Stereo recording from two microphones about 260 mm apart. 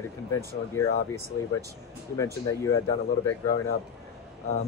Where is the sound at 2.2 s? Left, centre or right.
Centre.